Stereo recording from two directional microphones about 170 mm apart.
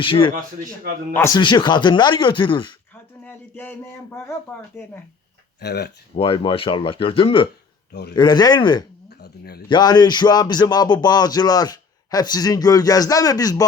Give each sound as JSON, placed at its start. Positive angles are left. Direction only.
{"t": 0.0, "sound": "speech", "side_deg": 30}
{"t": 1.1, "sound": "speech", "side_deg": 15}
{"t": 1.4, "sound": "speech", "side_deg": 25}
{"t": 3.2, "sound": "speech", "side_deg": 10}
{"t": 5.5, "sound": "speech", "side_deg": 75}
{"t": 6.1, "sound": "speech", "side_deg": 30}
{"t": 9.0, "sound": "a sound", "side_deg": 70}
{"t": 9.6, "sound": "speech", "side_deg": 25}